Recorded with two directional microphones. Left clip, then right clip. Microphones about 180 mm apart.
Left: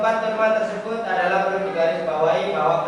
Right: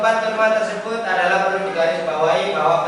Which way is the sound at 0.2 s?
10° left (ahead or behind).